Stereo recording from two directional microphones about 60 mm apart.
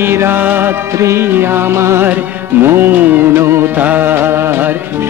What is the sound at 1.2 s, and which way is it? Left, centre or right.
Music, right.